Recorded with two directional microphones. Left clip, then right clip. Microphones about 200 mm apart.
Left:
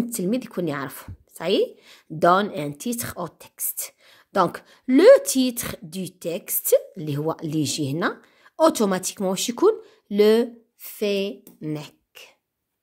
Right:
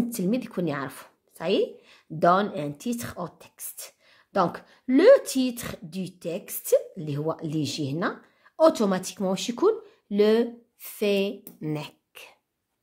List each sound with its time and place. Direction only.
0.1 s speech: 20° left (ahead or behind)